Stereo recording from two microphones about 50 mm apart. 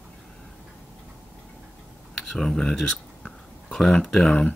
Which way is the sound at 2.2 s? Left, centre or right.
Centre.